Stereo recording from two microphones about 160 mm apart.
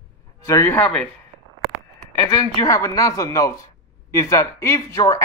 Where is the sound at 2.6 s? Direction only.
20° left (ahead or behind).